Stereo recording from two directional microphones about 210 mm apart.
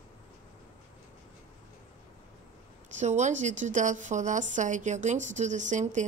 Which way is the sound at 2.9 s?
35° right (ahead or behind).